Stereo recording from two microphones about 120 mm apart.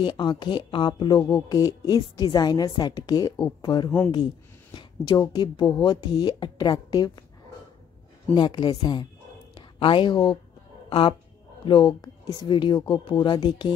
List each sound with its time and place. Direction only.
0.0 s a woman's voice: 40° left (ahead or behind)
8.4 s a woman's voice: 40° left (ahead or behind)